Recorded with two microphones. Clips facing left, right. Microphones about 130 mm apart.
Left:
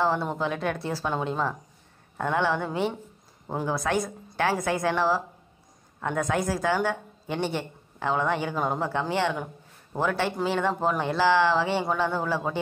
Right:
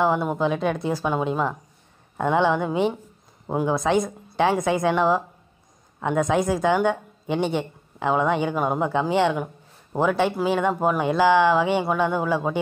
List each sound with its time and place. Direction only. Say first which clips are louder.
0.0 s a woman's voice: right 4 dB; 15° right (ahead or behind)